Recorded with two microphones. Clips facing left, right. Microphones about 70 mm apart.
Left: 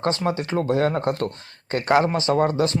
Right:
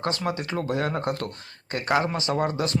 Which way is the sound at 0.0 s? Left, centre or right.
Left.